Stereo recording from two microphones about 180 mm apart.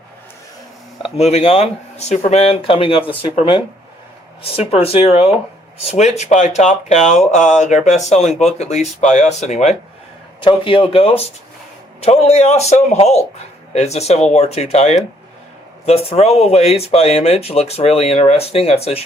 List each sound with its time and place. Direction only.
1.1 s speech: 35° left (ahead or behind)
10.4 s speech: 30° left (ahead or behind)